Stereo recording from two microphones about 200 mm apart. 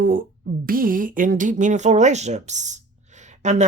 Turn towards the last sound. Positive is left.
turn(degrees=-35)  # may be behind; listen again after turning